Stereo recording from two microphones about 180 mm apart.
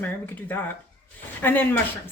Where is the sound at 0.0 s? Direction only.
10° left (ahead or behind).